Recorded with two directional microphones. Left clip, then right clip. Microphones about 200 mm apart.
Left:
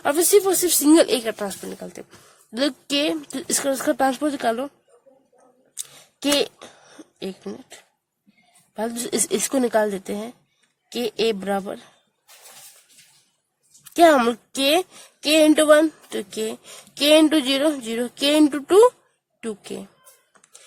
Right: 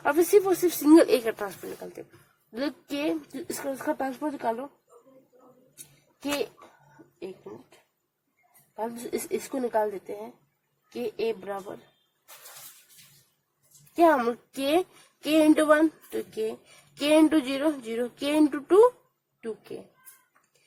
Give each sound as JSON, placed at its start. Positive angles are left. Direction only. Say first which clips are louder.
{"t": 0.0, "sound": "a woman's voice", "louder": "left 4 dB", "side_deg": 60}
{"t": 8.8, "sound": "a woman's voice", "louder": "left 7 dB", "side_deg": 45}
{"t": 10.9, "sound": "a woman's voice", "louder": "left 7 dB", "side_deg": 50}
{"t": 13.9, "sound": "a woman's voice", "louder": "left 6 dB", "side_deg": 45}